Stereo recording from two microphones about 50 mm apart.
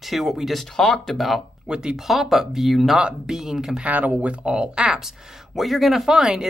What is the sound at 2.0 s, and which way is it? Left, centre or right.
Speech, centre.